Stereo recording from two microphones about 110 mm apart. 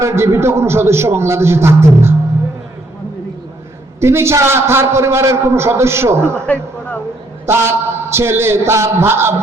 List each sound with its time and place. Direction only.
0.0 s a man's voice: 25° right (ahead or behind)
4.0 s a man's voice: 25° right (ahead or behind)
7.4 s a man's voice: 25° right (ahead or behind)